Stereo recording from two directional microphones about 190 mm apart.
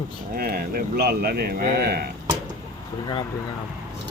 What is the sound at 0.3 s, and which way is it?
Speech, 50° right (ahead or behind).